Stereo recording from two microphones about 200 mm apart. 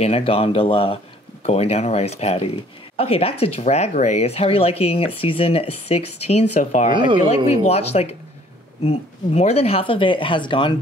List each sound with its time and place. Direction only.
0.0 s speech: 30° left (ahead or behind)
6.9 s speech: 25° right (ahead or behind)
7.2 s speech: 35° left (ahead or behind)